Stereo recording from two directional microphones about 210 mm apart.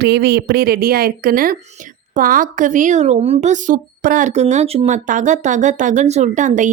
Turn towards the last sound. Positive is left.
turn(degrees=-35)  # may be behind; listen again after turning